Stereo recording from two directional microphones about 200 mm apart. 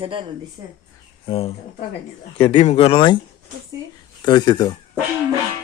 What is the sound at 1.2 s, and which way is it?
Speech, 30° left (ahead or behind).